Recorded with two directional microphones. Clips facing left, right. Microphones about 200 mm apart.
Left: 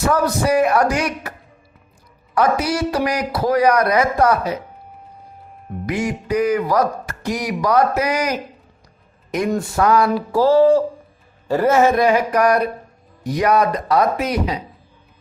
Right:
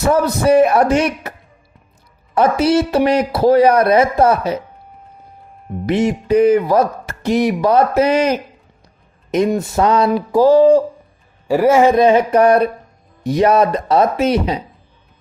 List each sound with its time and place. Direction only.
0.1 s speech: 25° right (ahead or behind)
2.3 s speech: 25° right (ahead or behind)
5.8 s speech: 25° right (ahead or behind)
10.2 s a sound: 15° right (ahead or behind)
11.4 s speech: 10° right (ahead or behind); by 14.6 s 25° right (ahead or behind)